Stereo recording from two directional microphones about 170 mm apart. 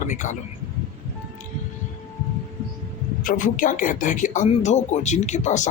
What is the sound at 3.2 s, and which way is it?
Speech, 50° left (ahead or behind).